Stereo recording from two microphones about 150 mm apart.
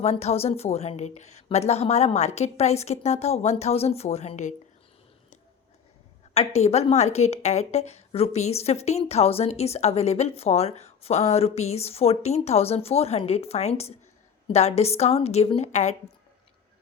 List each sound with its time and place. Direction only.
0.0 s a woman's voice: 45° left (ahead or behind)
6.3 s a woman's voice: 45° left (ahead or behind)